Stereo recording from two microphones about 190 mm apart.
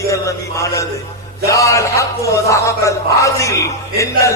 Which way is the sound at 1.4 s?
15° left (ahead or behind).